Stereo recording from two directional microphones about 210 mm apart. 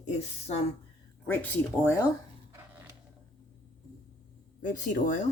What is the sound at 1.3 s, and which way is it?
Speech, 10° left (ahead or behind).